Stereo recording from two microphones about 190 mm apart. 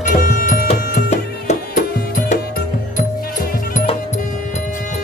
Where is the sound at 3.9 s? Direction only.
35° left (ahead or behind).